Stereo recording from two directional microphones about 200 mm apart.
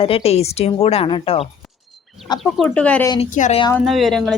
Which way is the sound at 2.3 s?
Centre (ahead or behind).